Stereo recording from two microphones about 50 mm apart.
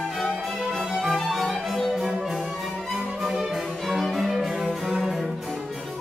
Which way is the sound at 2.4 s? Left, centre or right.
Centre.